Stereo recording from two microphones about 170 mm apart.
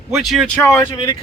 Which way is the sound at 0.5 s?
15° left (ahead or behind).